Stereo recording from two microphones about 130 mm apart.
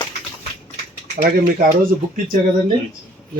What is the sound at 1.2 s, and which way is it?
Speech, 80° right.